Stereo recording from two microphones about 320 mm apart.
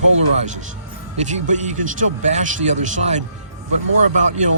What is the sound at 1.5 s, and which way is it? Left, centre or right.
Speech, right.